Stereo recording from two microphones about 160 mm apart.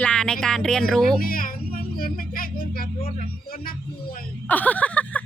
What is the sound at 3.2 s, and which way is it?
Music, 65° left (ahead or behind).